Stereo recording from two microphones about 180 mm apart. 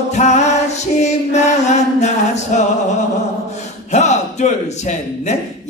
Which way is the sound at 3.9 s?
40° left (ahead or behind).